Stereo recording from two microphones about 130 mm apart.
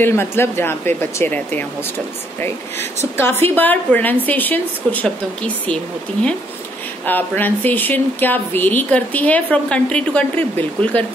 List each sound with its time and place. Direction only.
0.0 s speech: 20° left (ahead or behind)
3.2 s speech: 15° left (ahead or behind)
7.1 s speech: 15° left (ahead or behind)